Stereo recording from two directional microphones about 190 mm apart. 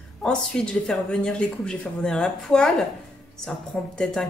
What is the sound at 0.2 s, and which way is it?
Speech, 5° left (ahead or behind).